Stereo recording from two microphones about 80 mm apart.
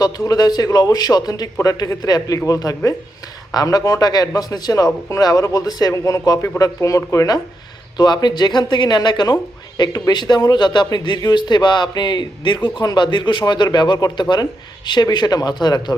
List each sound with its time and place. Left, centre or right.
0.0 s speech: left
7.9 s a man's voice: left